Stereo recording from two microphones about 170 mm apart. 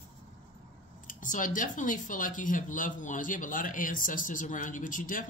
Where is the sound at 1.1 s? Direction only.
50° left (ahead or behind).